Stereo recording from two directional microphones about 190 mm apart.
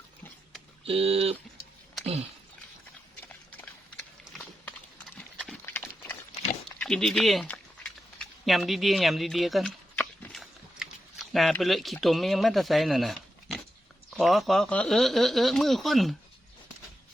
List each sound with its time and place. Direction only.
0.9 s speech: 30° right (ahead or behind)
5.1 s clip-clop: 5° left (ahead or behind)
6.7 s a sound: 5° left (ahead or behind)
14.2 s speech: centre (ahead or behind)